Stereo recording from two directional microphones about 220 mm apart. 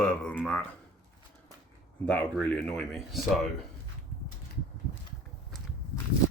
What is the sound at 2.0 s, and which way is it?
Speech, 5° left (ahead or behind).